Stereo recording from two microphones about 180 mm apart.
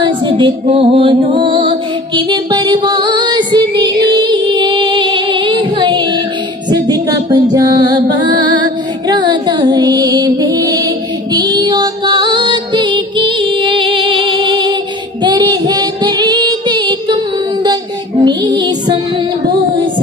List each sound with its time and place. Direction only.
0.0 s music: 25° right (ahead or behind)
0.7 s music: 35° right (ahead or behind)
15.2 s child singing: 25° right (ahead or behind)
18.2 s music: 25° right (ahead or behind)